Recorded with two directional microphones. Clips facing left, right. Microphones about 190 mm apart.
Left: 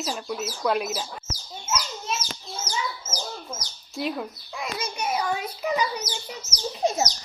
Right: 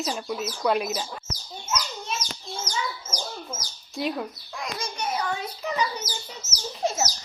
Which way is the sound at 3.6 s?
Centre (ahead or behind).